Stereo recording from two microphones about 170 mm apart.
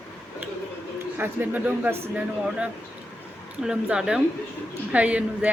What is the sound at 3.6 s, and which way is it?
A woman's voice, 5° right (ahead or behind).